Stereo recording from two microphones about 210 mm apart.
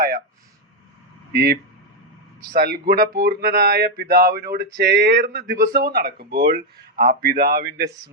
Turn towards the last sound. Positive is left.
turn(degrees=-50)  # may be behind; listen again after turning